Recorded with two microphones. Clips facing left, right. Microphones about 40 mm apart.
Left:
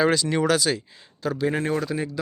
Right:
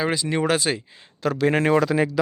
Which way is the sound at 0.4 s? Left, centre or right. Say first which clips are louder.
Right 1 dB; right.